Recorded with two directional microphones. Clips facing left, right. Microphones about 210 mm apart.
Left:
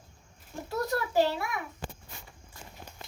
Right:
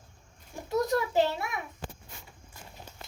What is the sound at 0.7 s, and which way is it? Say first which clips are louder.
Speech: right 3 dB; 20° right (ahead or behind).